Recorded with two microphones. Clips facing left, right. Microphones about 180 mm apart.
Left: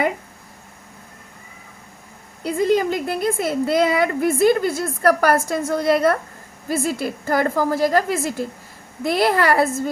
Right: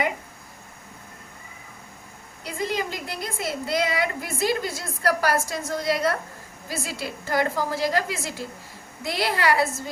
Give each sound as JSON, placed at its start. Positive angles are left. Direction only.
{"t": 2.4, "sound": "a woman's voice", "side_deg": 55}